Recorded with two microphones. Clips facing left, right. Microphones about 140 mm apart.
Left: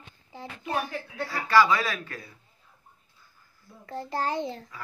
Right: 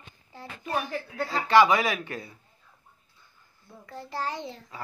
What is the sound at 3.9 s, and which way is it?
Speech, 50° left (ahead or behind).